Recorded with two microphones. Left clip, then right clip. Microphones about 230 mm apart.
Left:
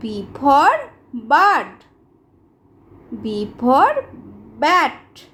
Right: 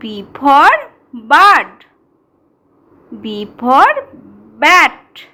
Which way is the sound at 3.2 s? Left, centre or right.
Centre.